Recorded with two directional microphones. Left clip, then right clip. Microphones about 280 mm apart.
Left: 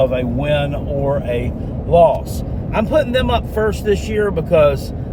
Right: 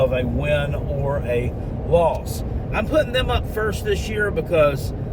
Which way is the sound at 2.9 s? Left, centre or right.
Centre.